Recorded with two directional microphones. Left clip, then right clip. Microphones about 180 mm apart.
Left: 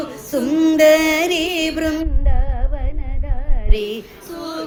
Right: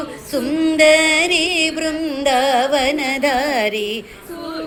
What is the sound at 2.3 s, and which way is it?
Carnatic music, 5° left (ahead or behind).